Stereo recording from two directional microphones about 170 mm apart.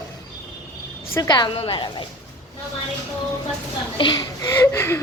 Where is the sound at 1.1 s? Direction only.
20° left (ahead or behind).